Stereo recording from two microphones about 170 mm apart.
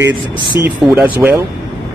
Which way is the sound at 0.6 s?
10° right (ahead or behind).